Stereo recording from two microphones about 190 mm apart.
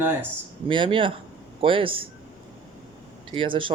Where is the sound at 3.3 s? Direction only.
25° right (ahead or behind).